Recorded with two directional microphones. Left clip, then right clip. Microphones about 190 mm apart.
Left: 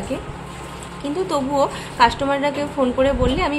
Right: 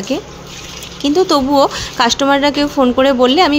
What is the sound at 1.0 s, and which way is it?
A woman's voice, 40° right (ahead or behind).